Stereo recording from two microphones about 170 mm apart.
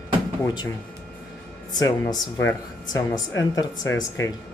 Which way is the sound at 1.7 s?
25° left (ahead or behind).